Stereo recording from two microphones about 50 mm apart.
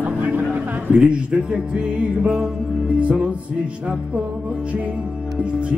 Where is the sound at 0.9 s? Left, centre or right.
Centre.